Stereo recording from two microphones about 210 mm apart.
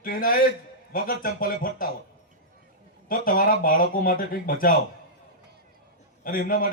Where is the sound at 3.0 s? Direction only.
40° left (ahead or behind).